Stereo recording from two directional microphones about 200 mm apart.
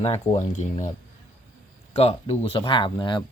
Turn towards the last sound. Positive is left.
turn(degrees=25)  # may be behind; listen again after turning